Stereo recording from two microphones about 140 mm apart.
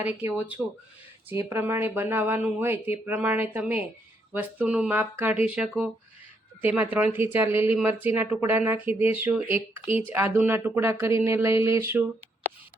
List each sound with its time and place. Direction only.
0.0 s speech: 10° right (ahead or behind)